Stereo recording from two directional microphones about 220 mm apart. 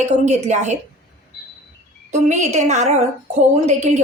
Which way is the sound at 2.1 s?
30° right (ahead or behind).